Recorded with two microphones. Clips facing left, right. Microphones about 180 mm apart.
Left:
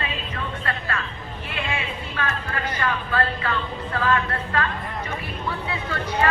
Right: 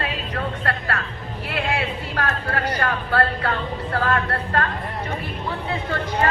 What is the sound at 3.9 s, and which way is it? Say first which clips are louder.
Speech: even; 35° right (ahead or behind).